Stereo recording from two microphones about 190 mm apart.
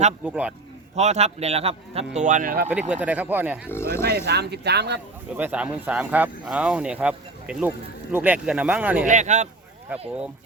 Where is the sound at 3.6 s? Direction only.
15° left (ahead or behind).